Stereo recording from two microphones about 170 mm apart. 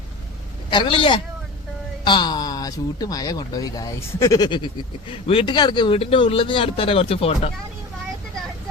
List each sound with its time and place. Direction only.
0.7 s speech: 30° left (ahead or behind)